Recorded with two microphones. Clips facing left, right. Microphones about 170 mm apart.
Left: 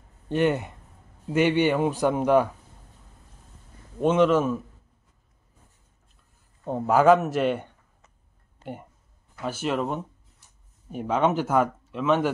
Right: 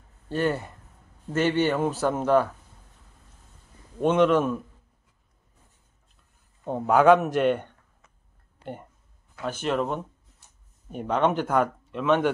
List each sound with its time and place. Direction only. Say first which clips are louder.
0.3 s a man's voice: left 3 dB; 20° left (ahead or behind)
4.0 s speech: even; 5° left (ahead or behind)
6.6 s speech: even; centre (ahead or behind)
9.4 s speech: even; 5° left (ahead or behind)